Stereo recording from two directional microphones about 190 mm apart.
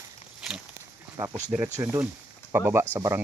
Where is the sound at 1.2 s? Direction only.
15° right (ahead or behind).